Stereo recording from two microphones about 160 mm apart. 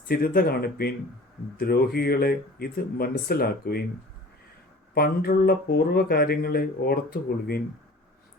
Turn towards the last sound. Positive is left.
turn(degrees=75)  # may be behind; listen again after turning